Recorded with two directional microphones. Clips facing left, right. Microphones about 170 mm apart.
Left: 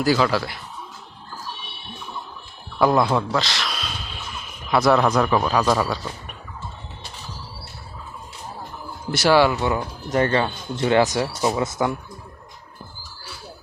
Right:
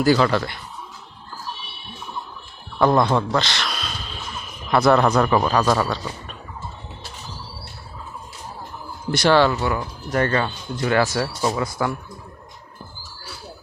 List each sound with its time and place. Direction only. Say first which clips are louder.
0.0 s speech: right 2 dB; centre (ahead or behind)
2.7 s a man's voice: right 1 dB; 5° left (ahead or behind)
9.1 s speech: even; 10° left (ahead or behind)
9.6 s speech: left 1 dB; 20° left (ahead or behind)